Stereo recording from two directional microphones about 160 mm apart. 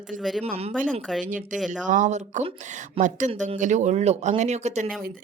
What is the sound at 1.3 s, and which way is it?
Speech, 55° right (ahead or behind).